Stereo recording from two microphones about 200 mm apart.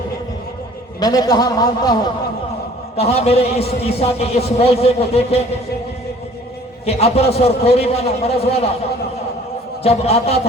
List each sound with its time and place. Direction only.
0.9 s a man's voice: 20° left (ahead or behind)
2.9 s a man's voice: 30° left (ahead or behind)
6.8 s a man's voice: 30° left (ahead or behind)
9.8 s a man's voice: 30° left (ahead or behind)